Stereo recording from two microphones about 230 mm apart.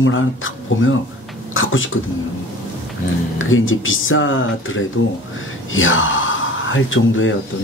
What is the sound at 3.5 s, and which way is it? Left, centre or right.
Speech, left.